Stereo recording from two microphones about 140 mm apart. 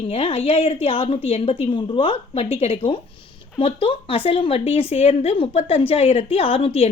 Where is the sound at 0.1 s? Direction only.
45° left (ahead or behind).